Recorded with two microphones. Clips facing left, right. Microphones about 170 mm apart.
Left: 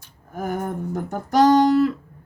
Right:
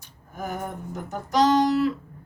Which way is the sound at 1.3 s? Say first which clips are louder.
Left 5 dB; 55° left (ahead or behind).